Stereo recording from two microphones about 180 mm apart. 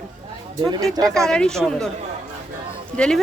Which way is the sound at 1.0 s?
5° left (ahead or behind).